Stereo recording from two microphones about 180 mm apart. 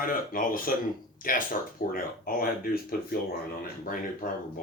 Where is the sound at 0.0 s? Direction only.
50° left (ahead or behind).